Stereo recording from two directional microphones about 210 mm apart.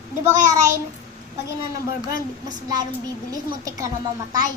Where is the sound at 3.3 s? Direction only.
15° right (ahead or behind).